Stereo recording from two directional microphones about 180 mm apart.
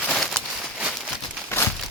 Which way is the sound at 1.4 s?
15° left (ahead or behind).